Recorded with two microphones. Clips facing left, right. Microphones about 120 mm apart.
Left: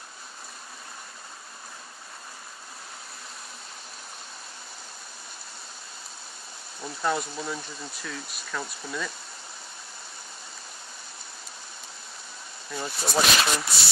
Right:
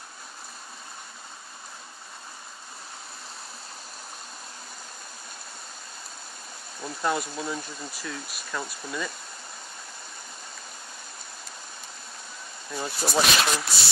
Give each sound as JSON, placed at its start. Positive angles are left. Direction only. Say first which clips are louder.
{"t": 6.8, "sound": "speech", "louder": "even", "side_deg": 0}
{"t": 12.7, "sound": "speech", "louder": "right 1 dB", "side_deg": 0}